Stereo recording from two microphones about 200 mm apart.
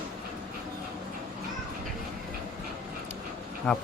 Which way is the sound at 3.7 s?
5° left (ahead or behind).